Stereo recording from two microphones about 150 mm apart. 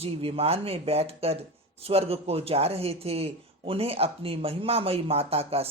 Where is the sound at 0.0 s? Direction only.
40° right (ahead or behind).